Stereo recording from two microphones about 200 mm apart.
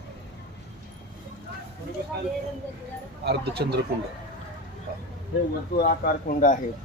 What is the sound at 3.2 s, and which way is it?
Speech, 55° right (ahead or behind).